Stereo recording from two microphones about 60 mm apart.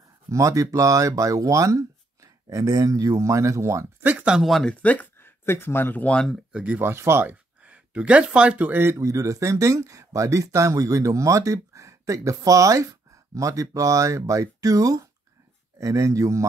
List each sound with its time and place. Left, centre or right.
0.3 s speech: right
4.0 s speech: right
4.4 s speech: centre
4.8 s speech: left
6.5 s speech: right
6.8 s speech: right
7.6 s speech: right
8.6 s speech: right
8.9 s speech: right
15.8 s speech: right